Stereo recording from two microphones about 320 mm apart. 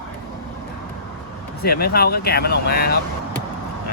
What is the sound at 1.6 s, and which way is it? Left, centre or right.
Speech, left.